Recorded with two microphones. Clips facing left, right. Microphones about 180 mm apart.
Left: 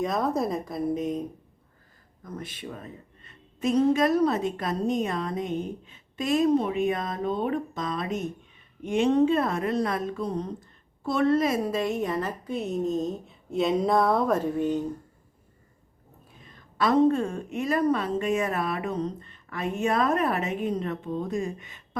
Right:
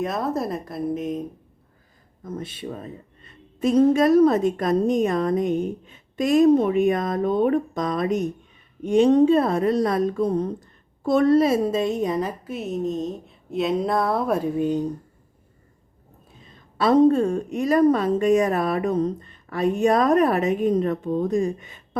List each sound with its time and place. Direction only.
0.0 s a woman's voice: 5° right (ahead or behind)
2.2 s a woman's voice: 25° right (ahead or behind)
12.5 s a woman's voice: centre (ahead or behind)
16.7 s a woman's voice: 35° right (ahead or behind)